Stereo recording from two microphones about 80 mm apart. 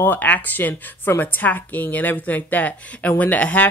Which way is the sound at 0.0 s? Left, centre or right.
Left.